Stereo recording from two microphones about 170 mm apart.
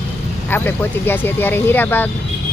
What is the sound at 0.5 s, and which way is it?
Speech, 10° left (ahead or behind).